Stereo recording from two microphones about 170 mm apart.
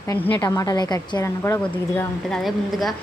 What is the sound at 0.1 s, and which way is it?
A woman's voice, 10° left (ahead or behind).